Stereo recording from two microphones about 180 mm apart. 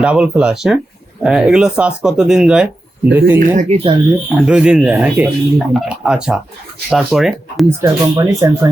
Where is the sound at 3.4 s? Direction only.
45° right (ahead or behind).